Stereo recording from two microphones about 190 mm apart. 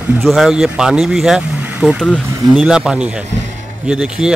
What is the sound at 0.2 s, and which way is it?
Speech, centre (ahead or behind).